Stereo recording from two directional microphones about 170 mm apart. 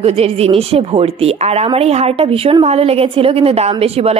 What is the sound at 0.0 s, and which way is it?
A woman's voice, 35° right (ahead or behind).